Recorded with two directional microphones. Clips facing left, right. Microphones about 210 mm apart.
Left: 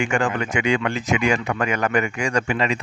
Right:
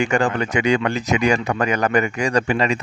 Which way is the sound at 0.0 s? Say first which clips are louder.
Right 3 dB; 35° right (ahead or behind).